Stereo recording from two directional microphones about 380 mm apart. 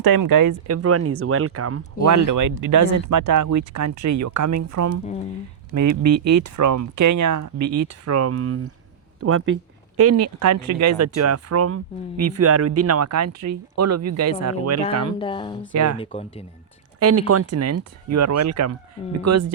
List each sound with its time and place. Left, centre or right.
0.0 s speech: right
2.0 s speech: right
15.2 s speech: centre
15.7 s speech: right
16.0 s speech: centre
17.0 s speech: right